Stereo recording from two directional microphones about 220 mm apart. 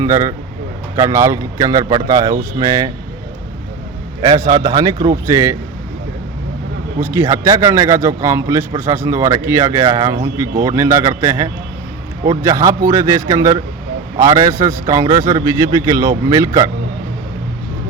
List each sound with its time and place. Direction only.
0.0 s a man's voice: 15° right (ahead or behind)
4.2 s a man's voice: 20° right (ahead or behind)
7.0 s a man's voice: 10° right (ahead or behind)